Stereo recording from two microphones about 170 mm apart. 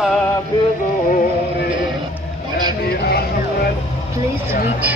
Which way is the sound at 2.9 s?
65° left (ahead or behind).